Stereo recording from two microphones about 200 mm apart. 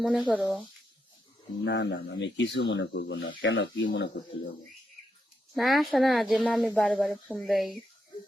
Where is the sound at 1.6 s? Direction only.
65° left (ahead or behind).